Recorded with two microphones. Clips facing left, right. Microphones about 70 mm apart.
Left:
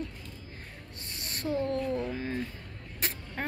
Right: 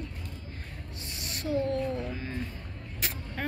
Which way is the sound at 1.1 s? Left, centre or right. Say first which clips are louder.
Even; left.